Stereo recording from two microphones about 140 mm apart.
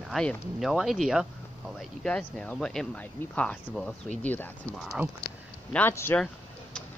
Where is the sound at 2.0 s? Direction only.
10° left (ahead or behind).